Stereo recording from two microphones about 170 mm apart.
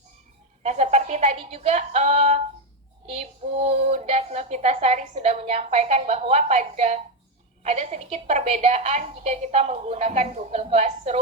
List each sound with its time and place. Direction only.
0.6 s a woman's voice: 40° right (ahead or behind)